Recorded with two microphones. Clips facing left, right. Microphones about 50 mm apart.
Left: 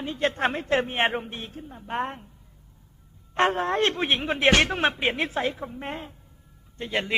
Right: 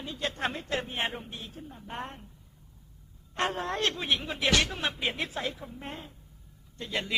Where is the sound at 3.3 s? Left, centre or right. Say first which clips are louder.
Left 8 dB; left.